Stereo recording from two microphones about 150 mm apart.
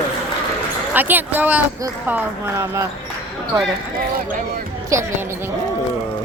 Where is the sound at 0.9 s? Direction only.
10° right (ahead or behind).